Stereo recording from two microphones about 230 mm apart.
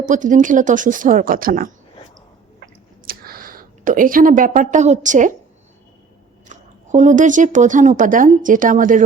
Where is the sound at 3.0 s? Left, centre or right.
Right.